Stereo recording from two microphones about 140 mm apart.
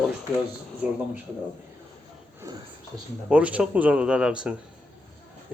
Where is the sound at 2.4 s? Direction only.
30° right (ahead or behind).